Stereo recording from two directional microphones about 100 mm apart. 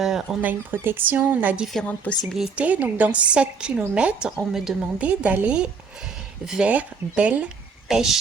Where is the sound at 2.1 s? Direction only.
15° left (ahead or behind).